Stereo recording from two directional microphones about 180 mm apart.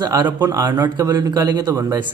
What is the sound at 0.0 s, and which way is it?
A man's voice, 20° right (ahead or behind).